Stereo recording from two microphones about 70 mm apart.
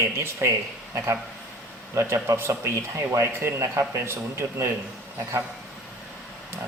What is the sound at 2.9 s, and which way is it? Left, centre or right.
A man's voice, right.